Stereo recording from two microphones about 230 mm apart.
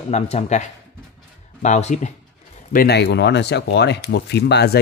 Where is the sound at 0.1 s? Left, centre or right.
Left.